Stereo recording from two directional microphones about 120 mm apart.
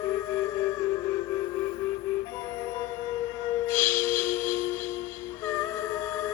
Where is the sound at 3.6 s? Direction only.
20° left (ahead or behind).